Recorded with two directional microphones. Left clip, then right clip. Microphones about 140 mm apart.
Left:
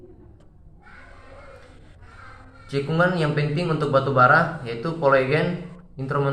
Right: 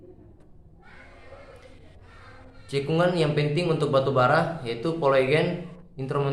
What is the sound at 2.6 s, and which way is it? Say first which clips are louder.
Speech: left 2 dB; 35° right (ahead or behind).